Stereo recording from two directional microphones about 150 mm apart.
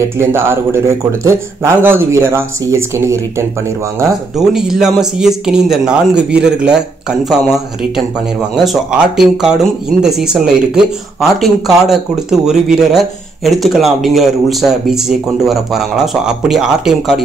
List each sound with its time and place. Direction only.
0.0 s a man's voice: 15° right (ahead or behind)
4.4 s a man's voice: 5° right (ahead or behind)